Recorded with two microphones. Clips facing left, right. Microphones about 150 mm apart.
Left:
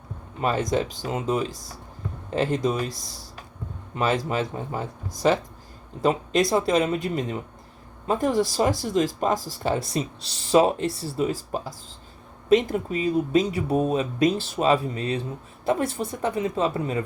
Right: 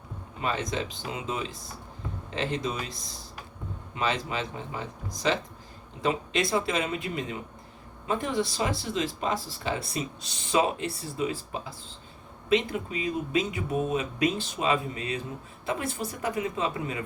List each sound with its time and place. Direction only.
0.4 s speech: 45° left (ahead or behind)
3.9 s speech: 45° left (ahead or behind)
6.0 s speech: 45° left (ahead or behind)
8.0 s speech: 40° left (ahead or behind)